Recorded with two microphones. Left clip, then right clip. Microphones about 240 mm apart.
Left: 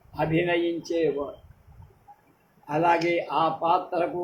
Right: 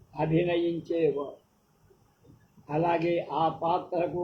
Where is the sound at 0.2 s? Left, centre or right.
Left.